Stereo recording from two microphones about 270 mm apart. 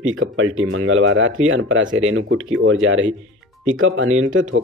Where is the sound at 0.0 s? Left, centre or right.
Right.